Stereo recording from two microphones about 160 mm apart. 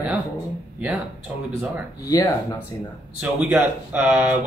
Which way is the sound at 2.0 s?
20° left (ahead or behind).